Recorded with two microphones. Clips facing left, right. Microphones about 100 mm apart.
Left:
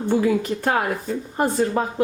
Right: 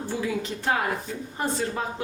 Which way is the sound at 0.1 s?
50° left (ahead or behind).